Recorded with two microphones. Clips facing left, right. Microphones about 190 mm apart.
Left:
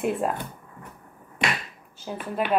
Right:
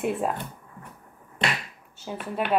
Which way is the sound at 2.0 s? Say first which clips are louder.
Left 1 dB; centre (ahead or behind).